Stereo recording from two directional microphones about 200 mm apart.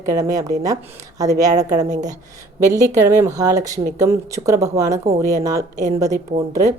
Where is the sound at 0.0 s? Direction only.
15° right (ahead or behind).